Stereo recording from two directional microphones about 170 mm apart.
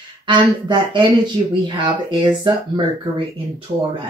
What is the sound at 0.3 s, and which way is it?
Speech, 25° right (ahead or behind).